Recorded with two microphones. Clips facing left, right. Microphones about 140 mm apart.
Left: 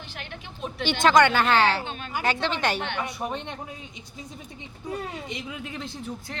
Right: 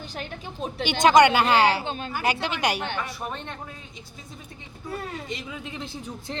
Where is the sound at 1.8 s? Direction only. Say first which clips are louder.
Right 4 dB; 30° right (ahead or behind).